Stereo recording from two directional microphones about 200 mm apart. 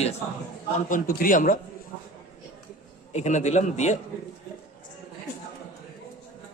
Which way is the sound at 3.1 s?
35° left (ahead or behind).